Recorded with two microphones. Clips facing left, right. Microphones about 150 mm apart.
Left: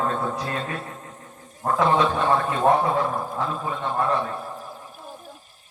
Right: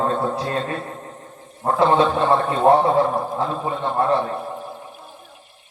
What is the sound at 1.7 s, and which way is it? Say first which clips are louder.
A man's voice: right 4 dB; 30° right (ahead or behind).